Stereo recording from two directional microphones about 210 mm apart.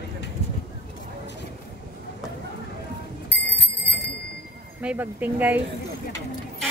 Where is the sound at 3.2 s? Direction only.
55° left (ahead or behind).